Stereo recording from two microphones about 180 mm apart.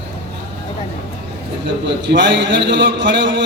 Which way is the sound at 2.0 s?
85° right.